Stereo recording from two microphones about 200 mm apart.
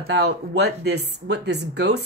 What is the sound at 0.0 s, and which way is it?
Speech, 55° right (ahead or behind).